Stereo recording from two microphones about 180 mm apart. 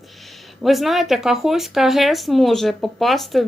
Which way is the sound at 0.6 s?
Centre (ahead or behind).